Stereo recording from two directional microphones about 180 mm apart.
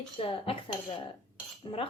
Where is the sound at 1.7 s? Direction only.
25° left (ahead or behind).